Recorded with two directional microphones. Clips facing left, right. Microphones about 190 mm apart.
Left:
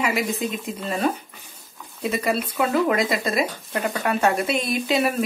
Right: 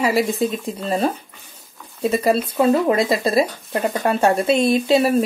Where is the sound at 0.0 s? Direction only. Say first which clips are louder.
Right 5 dB; 35° right (ahead or behind).